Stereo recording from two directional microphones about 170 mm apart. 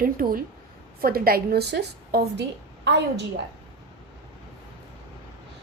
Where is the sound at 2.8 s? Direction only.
90° right.